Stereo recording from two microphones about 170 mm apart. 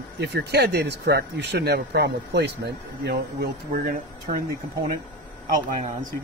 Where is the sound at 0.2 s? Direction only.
75° right (ahead or behind); by 4.4 s 55° right (ahead or behind).